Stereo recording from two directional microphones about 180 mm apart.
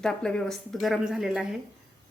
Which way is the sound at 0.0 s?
5° left (ahead or behind).